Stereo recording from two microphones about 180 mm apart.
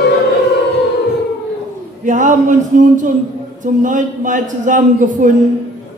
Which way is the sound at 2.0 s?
45° right (ahead or behind).